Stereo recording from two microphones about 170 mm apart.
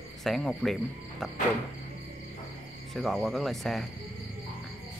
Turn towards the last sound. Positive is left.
turn(degrees=0)  # may be behind; listen again after turning